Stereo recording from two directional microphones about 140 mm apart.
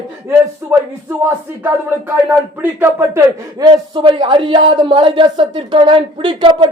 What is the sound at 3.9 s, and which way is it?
Speech, 35° right (ahead or behind).